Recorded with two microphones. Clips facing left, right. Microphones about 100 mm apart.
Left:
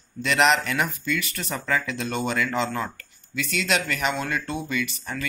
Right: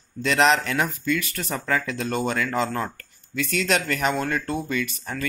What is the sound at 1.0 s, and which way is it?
Speech, 45° right (ahead or behind).